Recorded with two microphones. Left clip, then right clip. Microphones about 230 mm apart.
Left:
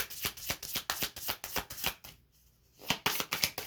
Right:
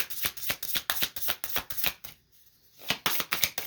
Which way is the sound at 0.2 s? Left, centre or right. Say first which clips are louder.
Right 4 dB; right.